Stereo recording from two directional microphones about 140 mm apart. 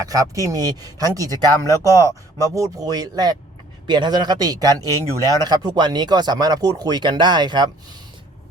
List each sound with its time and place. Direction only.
0.0 s speech: 25° right (ahead or behind)